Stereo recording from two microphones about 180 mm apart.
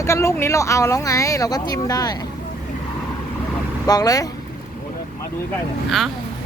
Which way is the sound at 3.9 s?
20° left (ahead or behind).